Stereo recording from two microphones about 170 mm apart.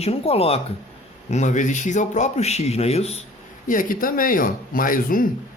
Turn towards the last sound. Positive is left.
turn(degrees=55)  # may be behind; listen again after turning